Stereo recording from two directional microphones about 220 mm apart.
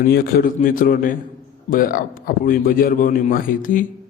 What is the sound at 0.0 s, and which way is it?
A man's voice, 45° left (ahead or behind).